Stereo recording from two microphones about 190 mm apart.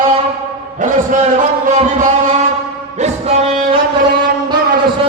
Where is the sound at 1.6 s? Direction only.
40° right (ahead or behind).